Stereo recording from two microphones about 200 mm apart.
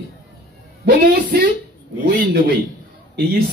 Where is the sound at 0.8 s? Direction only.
50° right (ahead or behind).